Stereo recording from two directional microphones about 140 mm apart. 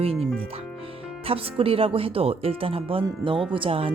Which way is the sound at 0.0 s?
45° right (ahead or behind).